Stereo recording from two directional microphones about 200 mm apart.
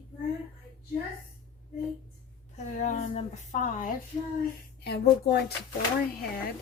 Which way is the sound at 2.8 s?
35° left (ahead or behind).